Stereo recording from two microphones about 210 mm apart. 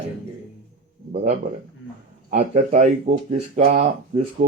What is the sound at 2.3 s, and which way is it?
Speech, 35° right (ahead or behind).